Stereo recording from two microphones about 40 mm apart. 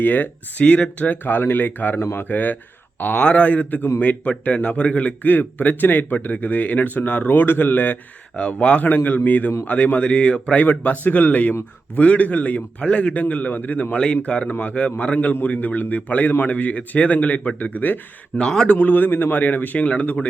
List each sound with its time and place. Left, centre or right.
0.0 s speech: left
0.6 s a man's voice: left
1.2 s speech: left
3.0 s a man's voice: left
8.4 s speech: left
9.0 s a man's voice: left
10.6 s a man's voice: left
13.9 s a man's voice: left
15.5 s a man's voice: left
18.3 s speech: centre
18.7 s speech: left